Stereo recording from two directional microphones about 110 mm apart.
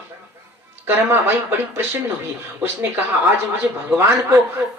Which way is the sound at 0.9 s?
20° right (ahead or behind).